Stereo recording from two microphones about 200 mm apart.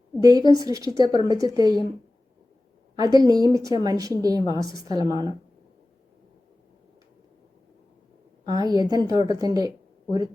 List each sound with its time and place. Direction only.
0.2 s a woman's voice: 20° right (ahead or behind)
2.9 s a woman's voice: 20° right (ahead or behind)
8.4 s a woman's voice: 20° right (ahead or behind)